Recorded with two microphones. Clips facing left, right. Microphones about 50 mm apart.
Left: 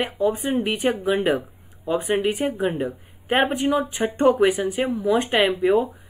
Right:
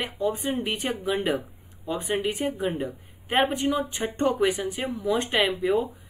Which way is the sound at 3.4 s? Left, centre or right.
Centre.